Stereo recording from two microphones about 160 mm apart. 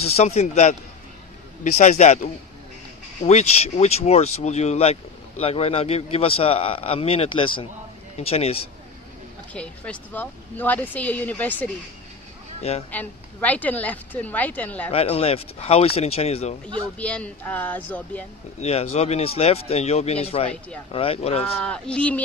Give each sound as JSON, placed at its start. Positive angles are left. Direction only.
{"t": 0.0, "sound": "speech", "side_deg": 40}
{"t": 9.5, "sound": "speech", "side_deg": 10}
{"t": 12.5, "sound": "speech", "side_deg": 40}
{"t": 12.9, "sound": "speech", "side_deg": 10}
{"t": 14.9, "sound": "speech", "side_deg": 40}
{"t": 17.0, "sound": "speech", "side_deg": 10}
{"t": 18.6, "sound": "speech", "side_deg": 40}
{"t": 21.5, "sound": "speech", "side_deg": 5}